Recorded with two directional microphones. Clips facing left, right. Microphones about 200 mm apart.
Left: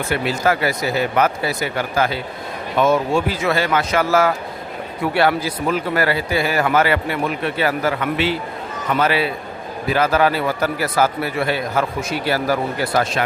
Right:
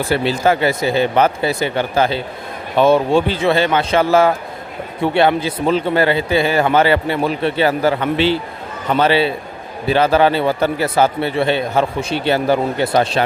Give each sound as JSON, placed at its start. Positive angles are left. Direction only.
{"t": 0.0, "sound": "a man's voice", "side_deg": -30}